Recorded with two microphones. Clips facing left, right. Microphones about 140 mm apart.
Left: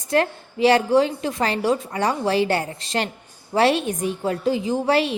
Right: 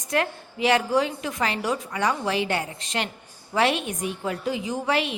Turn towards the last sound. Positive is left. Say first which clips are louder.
# left 5 dB
turn(degrees=35)  # may be behind; listen again after turning